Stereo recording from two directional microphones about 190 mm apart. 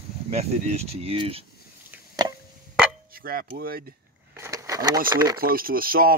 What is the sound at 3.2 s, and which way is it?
Speech, 50° right (ahead or behind).